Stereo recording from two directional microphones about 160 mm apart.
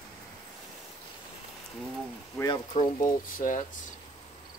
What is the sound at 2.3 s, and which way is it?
Speech, 25° left (ahead or behind).